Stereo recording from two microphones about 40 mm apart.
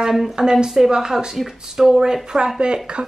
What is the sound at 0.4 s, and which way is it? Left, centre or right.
Speech, centre.